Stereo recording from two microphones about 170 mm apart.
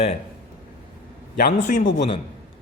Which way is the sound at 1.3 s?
55° left (ahead or behind).